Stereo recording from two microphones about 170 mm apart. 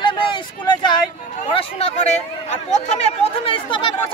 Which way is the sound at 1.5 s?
35° left (ahead or behind).